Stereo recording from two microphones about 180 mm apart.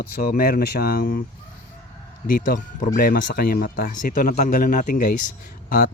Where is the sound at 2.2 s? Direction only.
55° left (ahead or behind).